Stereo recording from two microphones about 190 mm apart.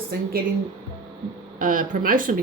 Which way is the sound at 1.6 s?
45° right (ahead or behind).